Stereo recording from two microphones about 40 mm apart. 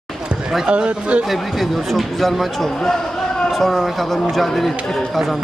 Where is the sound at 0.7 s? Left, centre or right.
Right.